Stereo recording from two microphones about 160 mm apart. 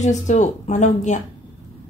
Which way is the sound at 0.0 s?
50° left (ahead or behind).